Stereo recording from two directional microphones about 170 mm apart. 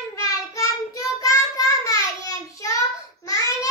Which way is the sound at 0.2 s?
20° left (ahead or behind).